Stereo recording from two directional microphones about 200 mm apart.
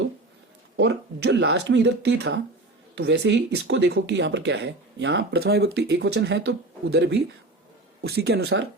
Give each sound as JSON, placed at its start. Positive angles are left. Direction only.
{"t": 0.8, "sound": "speech", "side_deg": -60}